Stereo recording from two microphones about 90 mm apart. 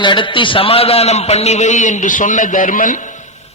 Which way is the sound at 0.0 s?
65° left (ahead or behind).